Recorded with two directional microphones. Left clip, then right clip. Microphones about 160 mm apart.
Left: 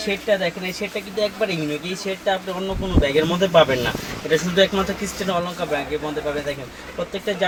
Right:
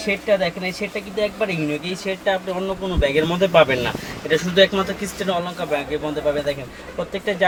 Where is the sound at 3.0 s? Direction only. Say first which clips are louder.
Even; 20° right (ahead or behind).